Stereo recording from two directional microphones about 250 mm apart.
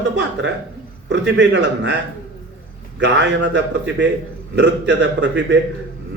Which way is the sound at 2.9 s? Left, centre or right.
Right.